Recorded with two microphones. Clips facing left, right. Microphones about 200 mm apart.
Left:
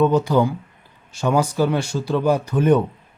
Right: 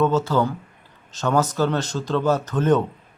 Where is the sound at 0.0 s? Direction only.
15° left (ahead or behind).